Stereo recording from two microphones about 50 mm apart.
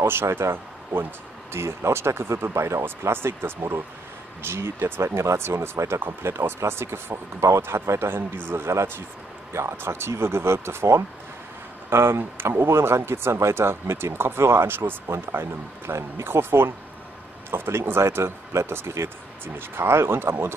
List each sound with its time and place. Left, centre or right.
0.0 s a man's voice: right
2.8 s a man's voice: right
6.3 s a man's voice: right
9.5 s a man's voice: right
15.9 s speech: right
16.3 s a man's voice: right
19.4 s speech: right